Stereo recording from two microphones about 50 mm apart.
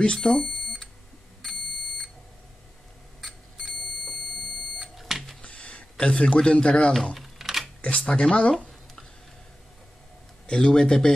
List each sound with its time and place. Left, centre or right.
0.0 s a man's voice: centre
1.4 s alarm clock: centre
3.5 s fire alarm: centre
4.7 s smoke detector: centre
5.4 s a sound: left
7.2 s typing: centre
7.8 s speech: left
10.5 s a man's voice: centre